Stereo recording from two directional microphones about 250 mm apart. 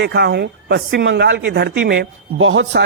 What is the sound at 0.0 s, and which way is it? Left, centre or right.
Speech, right.